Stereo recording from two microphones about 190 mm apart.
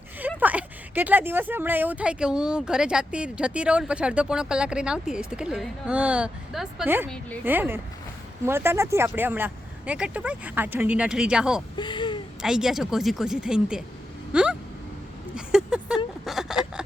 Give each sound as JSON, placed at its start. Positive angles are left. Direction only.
{"t": 0.2, "sound": "speech", "side_deg": -10}
{"t": 11.8, "sound": "speech", "side_deg": 25}
{"t": 12.4, "sound": "speech", "side_deg": -5}
{"t": 14.3, "sound": "vehicle", "side_deg": -5}
{"t": 15.4, "sound": "a sound", "side_deg": -5}